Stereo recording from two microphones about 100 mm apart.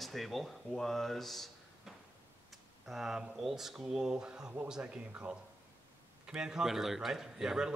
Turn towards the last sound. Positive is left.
turn(degrees=-5)  # may be behind; listen again after turning